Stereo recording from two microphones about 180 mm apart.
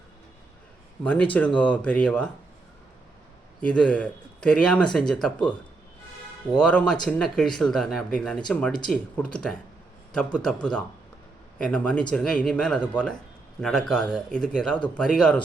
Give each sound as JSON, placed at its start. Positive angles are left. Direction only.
{"t": 1.0, "sound": "speech", "side_deg": 10}
{"t": 3.6, "sound": "speech", "side_deg": 5}